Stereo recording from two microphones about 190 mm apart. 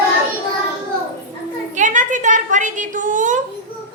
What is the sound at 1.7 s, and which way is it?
A woman's voice, 40° right (ahead or behind).